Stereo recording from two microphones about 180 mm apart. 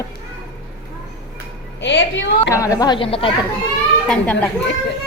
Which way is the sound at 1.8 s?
90° left.